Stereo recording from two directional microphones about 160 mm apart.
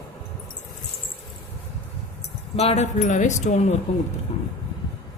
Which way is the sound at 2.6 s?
40° left (ahead or behind).